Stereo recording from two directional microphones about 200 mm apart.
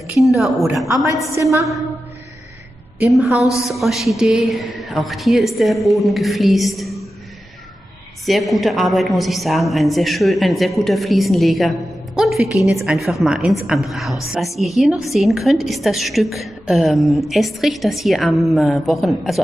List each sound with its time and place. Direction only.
0.4 s a woman's voice: centre (ahead or behind)
1.3 s a woman's voice: 15° right (ahead or behind)
3.1 s a woman's voice: centre (ahead or behind)
8.3 s a woman's voice: centre (ahead or behind)
12.2 s a sound: centre (ahead or behind)
12.7 s a woman's voice: centre (ahead or behind)